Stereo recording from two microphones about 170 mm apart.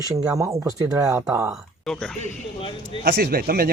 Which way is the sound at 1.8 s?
5° left (ahead or behind).